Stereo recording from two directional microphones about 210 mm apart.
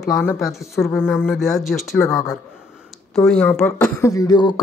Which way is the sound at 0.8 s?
Centre (ahead or behind).